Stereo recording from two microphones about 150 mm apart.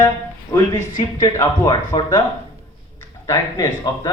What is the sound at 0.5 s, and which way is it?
Speech, 20° left (ahead or behind).